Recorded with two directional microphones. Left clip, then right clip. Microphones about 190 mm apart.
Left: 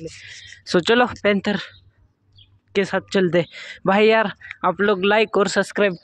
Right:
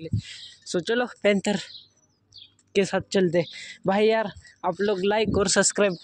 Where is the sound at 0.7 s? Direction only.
15° left (ahead or behind).